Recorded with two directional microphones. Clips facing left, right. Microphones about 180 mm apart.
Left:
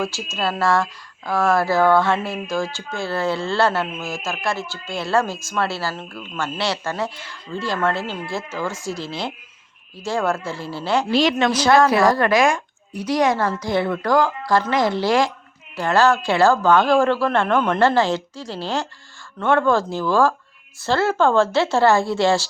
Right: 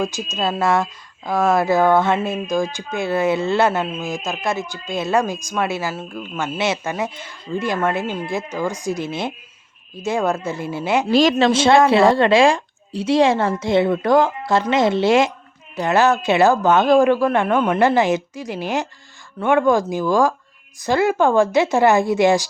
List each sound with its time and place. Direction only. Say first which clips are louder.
0.0 s speech: right 2 dB; 20° right (ahead or behind)
11.1 s a woman's voice: right 4 dB; 45° right (ahead or behind)
11.3 s speech: right 2 dB; 25° right (ahead or behind)